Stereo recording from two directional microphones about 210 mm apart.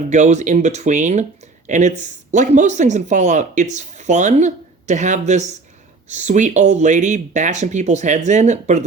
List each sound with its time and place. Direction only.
0.1 s speech: 35° right (ahead or behind)